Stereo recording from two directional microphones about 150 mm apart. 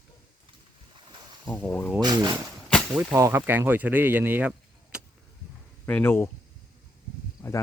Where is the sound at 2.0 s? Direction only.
30° right (ahead or behind); by 5.0 s 5° right (ahead or behind).